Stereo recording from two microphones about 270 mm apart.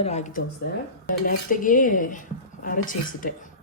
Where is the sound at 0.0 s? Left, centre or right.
Left.